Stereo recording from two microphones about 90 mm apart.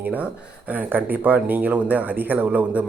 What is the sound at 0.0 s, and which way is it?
Speech, 20° right (ahead or behind).